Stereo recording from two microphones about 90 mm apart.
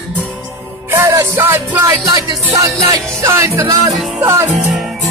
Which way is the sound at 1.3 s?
25° right (ahead or behind).